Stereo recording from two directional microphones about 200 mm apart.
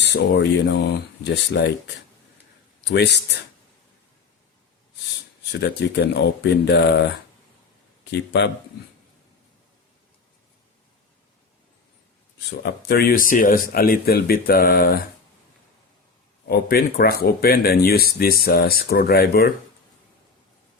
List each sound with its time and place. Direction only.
0.0 s speech: 60° left (ahead or behind)
2.8 s speech: 55° left (ahead or behind)
5.5 s speech: 60° left (ahead or behind)
12.5 s speech: 55° left (ahead or behind)
16.5 s speech: 50° left (ahead or behind)